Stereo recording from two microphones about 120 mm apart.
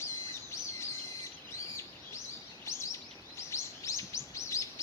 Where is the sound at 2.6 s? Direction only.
25° left (ahead or behind).